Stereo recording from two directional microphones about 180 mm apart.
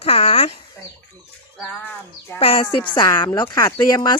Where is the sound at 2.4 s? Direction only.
30° left (ahead or behind).